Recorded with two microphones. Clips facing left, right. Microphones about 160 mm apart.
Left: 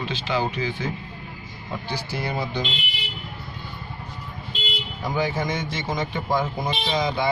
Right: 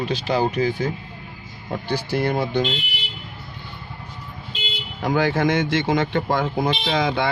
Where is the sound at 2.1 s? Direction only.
55° right (ahead or behind).